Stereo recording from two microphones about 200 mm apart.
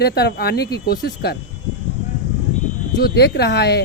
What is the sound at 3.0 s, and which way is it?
Speech, 55° left (ahead or behind).